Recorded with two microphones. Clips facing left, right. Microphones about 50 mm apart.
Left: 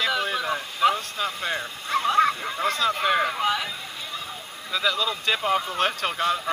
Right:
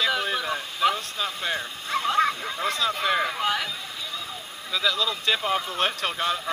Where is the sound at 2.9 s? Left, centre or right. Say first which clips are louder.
Left 2 dB; centre.